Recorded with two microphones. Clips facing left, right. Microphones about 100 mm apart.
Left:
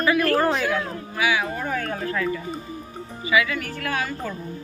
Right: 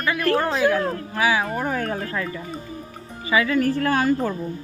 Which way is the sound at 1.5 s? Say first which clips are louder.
Right 3 dB; 25° right (ahead or behind).